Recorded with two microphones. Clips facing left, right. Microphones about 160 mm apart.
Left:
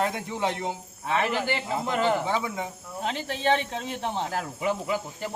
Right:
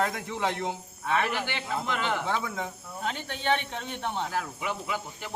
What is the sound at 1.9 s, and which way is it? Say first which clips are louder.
Cricket: left 7 dB; 40° left (ahead or behind).